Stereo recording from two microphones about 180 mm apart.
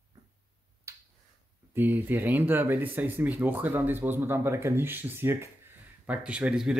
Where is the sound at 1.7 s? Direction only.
10° right (ahead or behind).